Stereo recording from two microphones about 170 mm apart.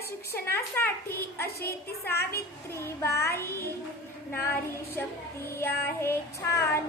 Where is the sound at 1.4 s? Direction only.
65° left (ahead or behind).